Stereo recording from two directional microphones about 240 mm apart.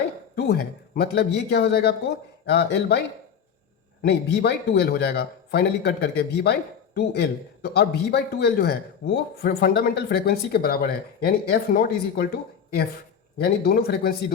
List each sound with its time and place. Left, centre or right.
0.3 s speech: left
4.0 s speech: left